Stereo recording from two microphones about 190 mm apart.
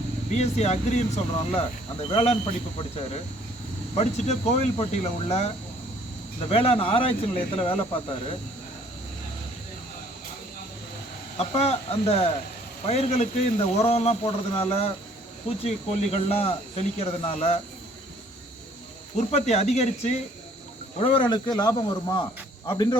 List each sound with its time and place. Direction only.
0.3 s speech: 35° left (ahead or behind)
3.9 s speech: 35° left (ahead or behind)
6.5 s speech: 30° left (ahead or behind)
11.3 s speech: 35° left (ahead or behind)
19.1 s speech: 35° left (ahead or behind)
21.0 s speech: 25° left (ahead or behind)